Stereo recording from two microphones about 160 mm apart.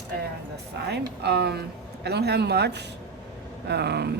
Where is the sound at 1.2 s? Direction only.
90° right.